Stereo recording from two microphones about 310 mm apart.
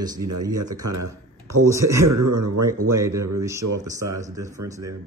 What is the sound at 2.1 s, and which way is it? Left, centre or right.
Speech, right.